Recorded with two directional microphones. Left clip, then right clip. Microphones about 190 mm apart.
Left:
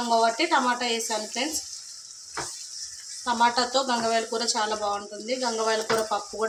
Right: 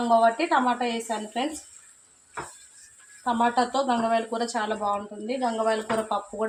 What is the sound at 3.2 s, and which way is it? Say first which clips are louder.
Speech: left 1 dB; 30° right (ahead or behind).